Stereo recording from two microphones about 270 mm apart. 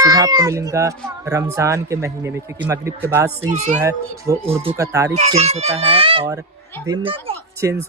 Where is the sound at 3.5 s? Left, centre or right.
Right.